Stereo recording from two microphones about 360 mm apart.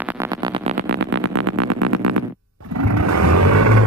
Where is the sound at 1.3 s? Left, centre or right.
Right.